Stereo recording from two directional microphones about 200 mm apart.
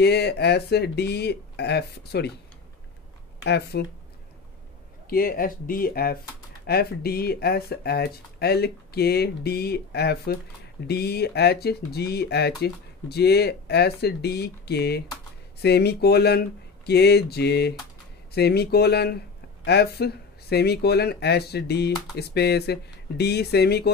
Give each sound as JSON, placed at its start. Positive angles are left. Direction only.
{"t": 0.0, "sound": "speech", "side_deg": 55}
{"t": 3.4, "sound": "speech", "side_deg": 55}
{"t": 5.1, "sound": "speech", "side_deg": 45}